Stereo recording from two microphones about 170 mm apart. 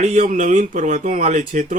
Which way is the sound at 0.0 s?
45° right (ahead or behind).